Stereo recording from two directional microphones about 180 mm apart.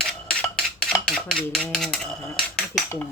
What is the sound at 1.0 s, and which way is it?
Dishes, centre (ahead or behind).